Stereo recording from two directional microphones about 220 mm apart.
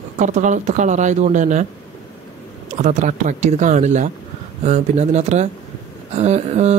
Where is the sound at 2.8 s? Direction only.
30° right (ahead or behind).